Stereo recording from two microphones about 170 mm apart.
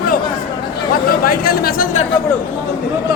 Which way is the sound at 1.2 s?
60° left (ahead or behind).